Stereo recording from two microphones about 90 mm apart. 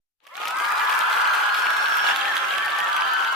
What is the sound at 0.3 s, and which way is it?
Crowd, centre (ahead or behind).